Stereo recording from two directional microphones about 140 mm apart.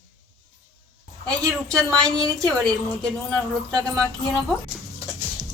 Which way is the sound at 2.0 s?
25° right (ahead or behind).